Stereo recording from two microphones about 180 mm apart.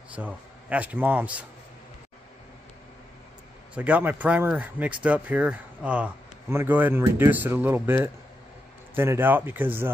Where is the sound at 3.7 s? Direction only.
5° right (ahead or behind).